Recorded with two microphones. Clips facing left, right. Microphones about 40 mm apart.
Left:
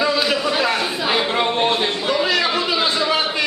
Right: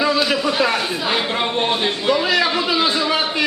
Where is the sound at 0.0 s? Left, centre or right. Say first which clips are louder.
Right 1 dB; centre.